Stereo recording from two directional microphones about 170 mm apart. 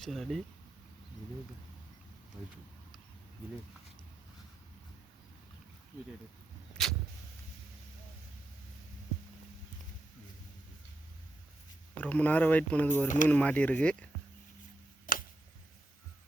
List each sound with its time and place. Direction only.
0.0 s speech: centre (ahead or behind)
6.8 s vehicle: centre (ahead or behind)
11.9 s speech: 10° left (ahead or behind)
15.1 s a sound: 55° left (ahead or behind)